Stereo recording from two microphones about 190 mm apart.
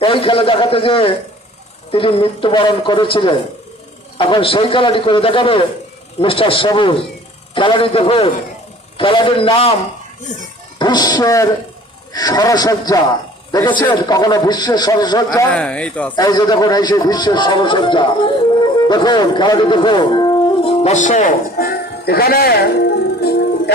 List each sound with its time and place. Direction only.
0.0 s a man's voice: 30° left (ahead or behind)
10.8 s a man's voice: 20° left (ahead or behind)
15.4 s speech: 5° left (ahead or behind)
16.1 s a man's voice: 20° left (ahead or behind); by 23.7 s 55° left (ahead or behind)